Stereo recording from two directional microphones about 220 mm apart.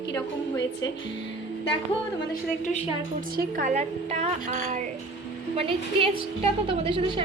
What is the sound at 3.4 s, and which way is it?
A woman's voice, 35° right (ahead or behind).